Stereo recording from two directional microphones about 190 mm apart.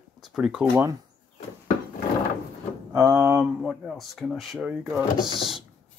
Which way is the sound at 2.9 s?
15° right (ahead or behind).